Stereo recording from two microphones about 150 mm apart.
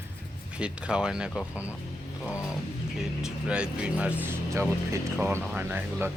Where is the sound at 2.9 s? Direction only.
5° right (ahead or behind).